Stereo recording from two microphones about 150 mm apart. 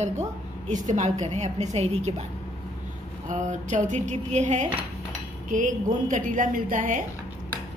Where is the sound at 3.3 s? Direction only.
55° right (ahead or behind).